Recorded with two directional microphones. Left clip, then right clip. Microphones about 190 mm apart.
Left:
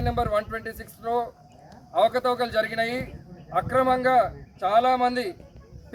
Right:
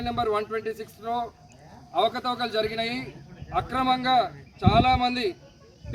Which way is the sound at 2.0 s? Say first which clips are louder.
Left 3 dB; 10° left (ahead or behind).